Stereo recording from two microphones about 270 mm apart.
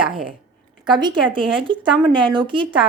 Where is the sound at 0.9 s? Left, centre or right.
Centre.